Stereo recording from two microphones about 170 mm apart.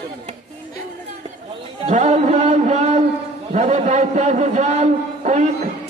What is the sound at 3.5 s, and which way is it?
A man's voice, 45° right (ahead or behind).